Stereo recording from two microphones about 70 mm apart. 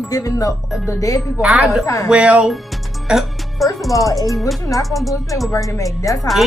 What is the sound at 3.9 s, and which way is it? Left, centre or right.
Speech, left.